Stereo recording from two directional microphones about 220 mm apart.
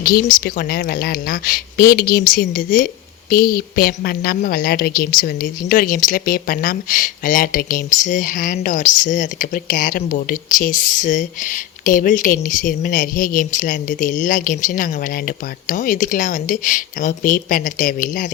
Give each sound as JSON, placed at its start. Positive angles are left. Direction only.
{"t": 0.3, "sound": "speech", "side_deg": 40}